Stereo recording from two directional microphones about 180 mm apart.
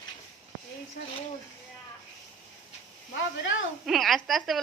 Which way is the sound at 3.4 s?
90° left.